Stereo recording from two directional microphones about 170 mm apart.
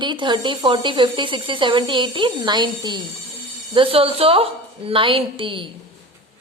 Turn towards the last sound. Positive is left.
turn(degrees=-30)  # may be behind; listen again after turning